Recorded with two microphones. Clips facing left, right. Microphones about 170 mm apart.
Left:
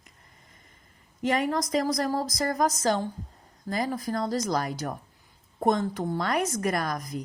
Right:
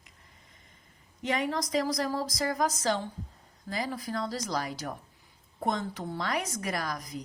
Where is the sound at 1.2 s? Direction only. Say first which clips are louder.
Left 4 dB; 50° left (ahead or behind).